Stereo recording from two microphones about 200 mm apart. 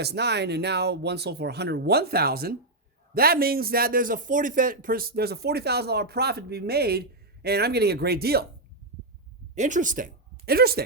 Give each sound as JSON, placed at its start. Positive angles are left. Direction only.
{"t": 0.0, "sound": "a man's voice", "side_deg": -55}
{"t": 9.6, "sound": "speech", "side_deg": -40}